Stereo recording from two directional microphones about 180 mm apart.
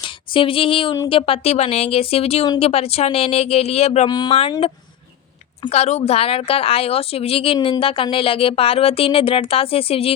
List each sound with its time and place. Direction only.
0.0 s a sound: 30° left (ahead or behind)
1.0 s a woman's voice: 30° left (ahead or behind)
4.1 s speech: 25° left (ahead or behind)
5.6 s a woman's voice: 35° left (ahead or behind)